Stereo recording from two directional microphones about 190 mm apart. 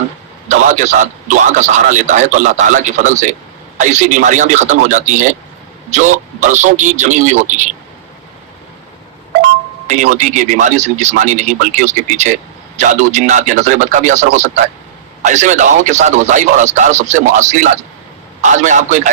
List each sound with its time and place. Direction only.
0.4 s speech: 40° right (ahead or behind)
9.8 s speech: 40° right (ahead or behind)